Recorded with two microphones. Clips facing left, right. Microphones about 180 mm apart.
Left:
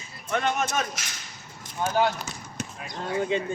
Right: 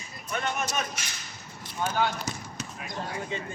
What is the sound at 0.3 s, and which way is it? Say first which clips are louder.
Speech: left 5 dB; 55° left (ahead or behind).